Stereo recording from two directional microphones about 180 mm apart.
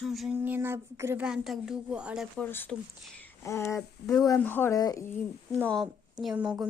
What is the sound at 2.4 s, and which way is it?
Speech, 10° left (ahead or behind).